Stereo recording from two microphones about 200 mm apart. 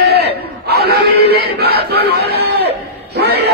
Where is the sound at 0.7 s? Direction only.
50° right (ahead or behind).